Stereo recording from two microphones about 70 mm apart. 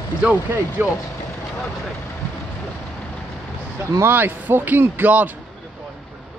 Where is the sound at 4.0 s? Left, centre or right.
Right.